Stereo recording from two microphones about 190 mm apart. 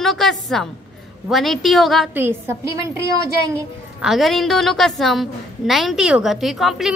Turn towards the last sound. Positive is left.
turn(degrees=0)  # may be behind; listen again after turning